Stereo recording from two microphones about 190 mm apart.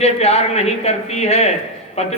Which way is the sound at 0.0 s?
35° left (ahead or behind).